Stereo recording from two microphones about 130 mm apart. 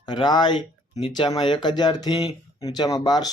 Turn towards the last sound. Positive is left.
turn(degrees=30)  # may be behind; listen again after turning